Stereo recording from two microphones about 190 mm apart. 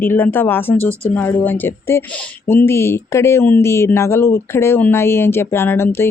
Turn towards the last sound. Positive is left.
turn(degrees=10)  # may be behind; listen again after turning